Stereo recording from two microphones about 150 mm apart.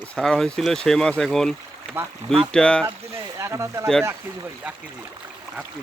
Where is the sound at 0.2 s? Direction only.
5° left (ahead or behind).